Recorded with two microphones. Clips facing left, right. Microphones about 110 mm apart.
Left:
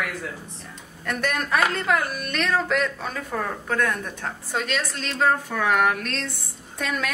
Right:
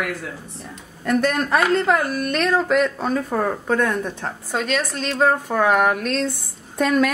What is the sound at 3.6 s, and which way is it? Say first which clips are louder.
Speech: right 4 dB; 25° right (ahead or behind).